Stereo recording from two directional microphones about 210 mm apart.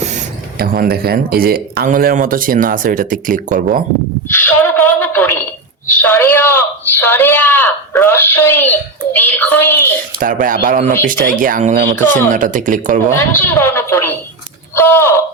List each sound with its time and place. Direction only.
0.6 s speech: 45° right (ahead or behind)
4.3 s a man's voice: 10° left (ahead or behind)
10.2 s speech: 40° right (ahead or behind)
13.1 s a man's voice: 10° left (ahead or behind)